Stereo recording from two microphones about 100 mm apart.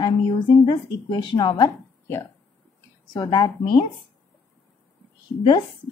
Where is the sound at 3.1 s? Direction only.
50° left (ahead or behind).